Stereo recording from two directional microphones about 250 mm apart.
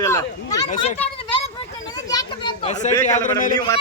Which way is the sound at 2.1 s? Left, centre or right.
Centre.